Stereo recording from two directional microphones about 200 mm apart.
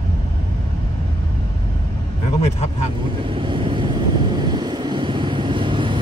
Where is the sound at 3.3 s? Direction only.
25° right (ahead or behind).